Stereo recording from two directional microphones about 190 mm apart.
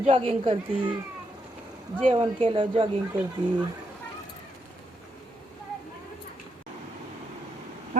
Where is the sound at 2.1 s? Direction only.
25° right (ahead or behind).